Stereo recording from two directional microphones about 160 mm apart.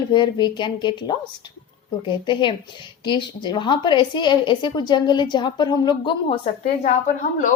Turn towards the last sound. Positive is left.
turn(degrees=50)  # may be behind; listen again after turning